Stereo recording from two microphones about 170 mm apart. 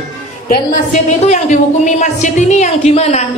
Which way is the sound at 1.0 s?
45° left (ahead or behind).